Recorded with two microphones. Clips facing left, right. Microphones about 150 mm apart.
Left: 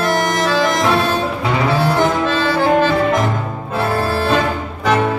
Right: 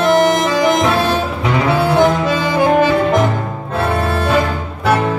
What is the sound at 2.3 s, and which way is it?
Music, 15° right (ahead or behind).